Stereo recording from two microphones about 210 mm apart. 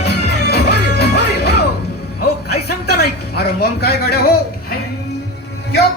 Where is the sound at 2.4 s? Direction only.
50° left (ahead or behind).